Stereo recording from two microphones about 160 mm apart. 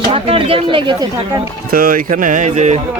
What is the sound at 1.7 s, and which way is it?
Speech, 60° right (ahead or behind).